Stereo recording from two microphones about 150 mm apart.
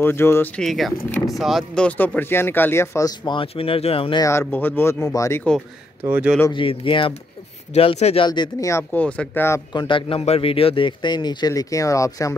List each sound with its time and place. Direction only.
0.0 s speech: 15° left (ahead or behind)
0.6 s speech: centre (ahead or behind); by 4.2 s 40° left (ahead or behind)
4.2 s speech: 15° left (ahead or behind)
6.0 s speech: 10° right (ahead or behind)
6.5 s a man's voice: 35° left (ahead or behind)
8.3 s speech: 25° left (ahead or behind)
9.7 s a man's voice: 30° left (ahead or behind)